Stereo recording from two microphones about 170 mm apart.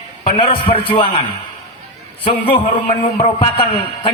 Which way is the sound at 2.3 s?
30° left (ahead or behind).